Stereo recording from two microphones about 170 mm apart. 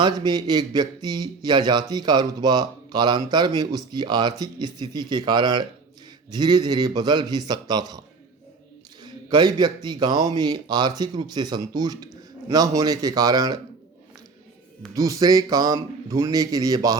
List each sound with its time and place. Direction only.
0.0 s speech: 25° right (ahead or behind)
9.0 s speech: 25° right (ahead or behind)
14.9 s speech: 20° right (ahead or behind)